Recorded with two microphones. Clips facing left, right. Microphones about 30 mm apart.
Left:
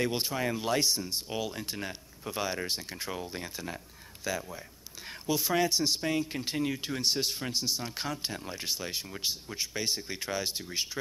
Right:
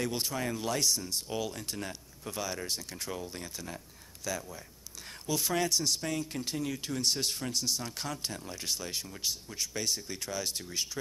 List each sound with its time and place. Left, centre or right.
0.0 s speech: left